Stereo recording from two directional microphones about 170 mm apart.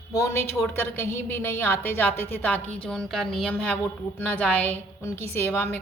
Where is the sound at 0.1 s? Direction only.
15° left (ahead or behind).